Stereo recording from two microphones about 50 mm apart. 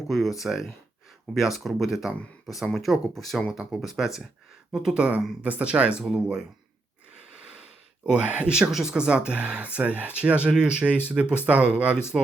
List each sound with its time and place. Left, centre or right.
0.1 s speech: centre
4.9 s speech: right
6.0 s speech: centre
8.2 s speech: right
8.7 s speech: centre